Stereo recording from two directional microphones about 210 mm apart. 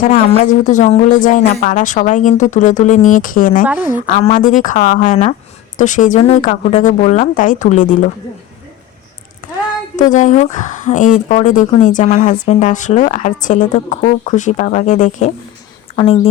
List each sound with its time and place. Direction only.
0.0 s speech: 40° left (ahead or behind)
10.0 s speech: 35° left (ahead or behind)